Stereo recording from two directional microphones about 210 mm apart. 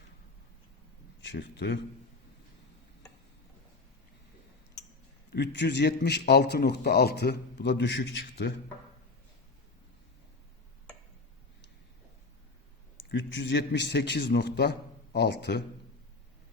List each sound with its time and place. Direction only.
1.2 s a man's voice: 55° left (ahead or behind)
5.3 s a man's voice: 55° left (ahead or behind)
13.0 s a man's voice: 60° left (ahead or behind)